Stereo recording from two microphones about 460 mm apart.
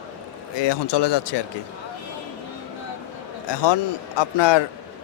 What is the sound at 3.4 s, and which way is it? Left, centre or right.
A man's voice, left.